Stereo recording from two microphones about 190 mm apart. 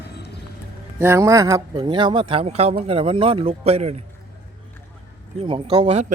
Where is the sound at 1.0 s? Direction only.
15° right (ahead or behind); by 4.0 s 35° right (ahead or behind).